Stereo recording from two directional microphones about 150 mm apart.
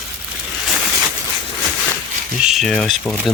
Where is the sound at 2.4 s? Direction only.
Centre (ahead or behind).